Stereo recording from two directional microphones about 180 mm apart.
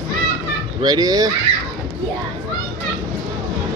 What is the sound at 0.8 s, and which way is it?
Speech, 20° right (ahead or behind).